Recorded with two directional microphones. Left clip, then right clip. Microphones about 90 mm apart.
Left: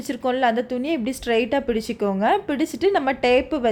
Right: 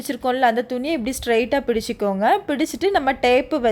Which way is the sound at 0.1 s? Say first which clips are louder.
Right 2 dB; 25° right (ahead or behind).